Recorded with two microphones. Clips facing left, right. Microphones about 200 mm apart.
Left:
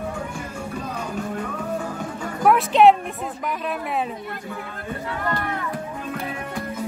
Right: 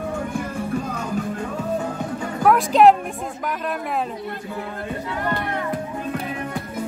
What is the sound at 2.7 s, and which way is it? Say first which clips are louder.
Music: right 1 dB; centre (ahead or behind).